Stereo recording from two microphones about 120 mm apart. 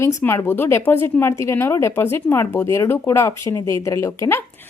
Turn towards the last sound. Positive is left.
turn(degrees=20)  # may be behind; listen again after turning